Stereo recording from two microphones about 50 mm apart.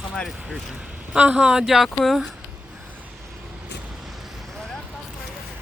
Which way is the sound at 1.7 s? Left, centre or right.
Centre.